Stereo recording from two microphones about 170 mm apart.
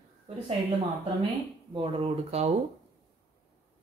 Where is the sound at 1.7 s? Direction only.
35° right (ahead or behind).